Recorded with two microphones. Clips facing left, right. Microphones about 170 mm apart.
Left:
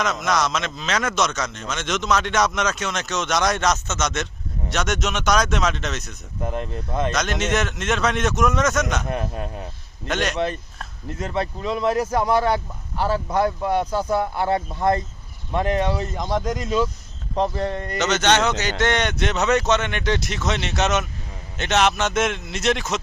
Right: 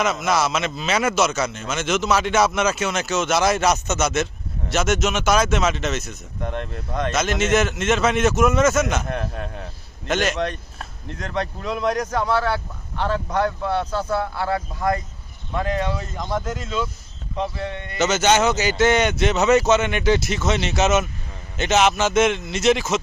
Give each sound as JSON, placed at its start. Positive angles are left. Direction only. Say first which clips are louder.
{"t": 0.0, "sound": "speech", "louder": "right 2 dB", "side_deg": -5}
{"t": 17.3, "sound": "speech", "louder": "left 4 dB", "side_deg": 35}
{"t": 17.9, "sound": "speech", "louder": "right 2 dB", "side_deg": -5}